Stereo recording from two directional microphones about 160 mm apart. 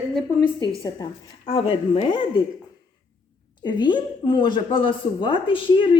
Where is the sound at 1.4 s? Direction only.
40° left (ahead or behind).